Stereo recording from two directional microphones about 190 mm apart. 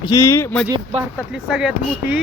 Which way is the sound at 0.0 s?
15° left (ahead or behind).